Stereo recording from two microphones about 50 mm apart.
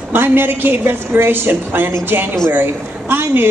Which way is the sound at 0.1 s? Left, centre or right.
Right.